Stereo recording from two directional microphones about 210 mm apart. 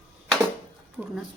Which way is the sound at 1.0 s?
5° right (ahead or behind).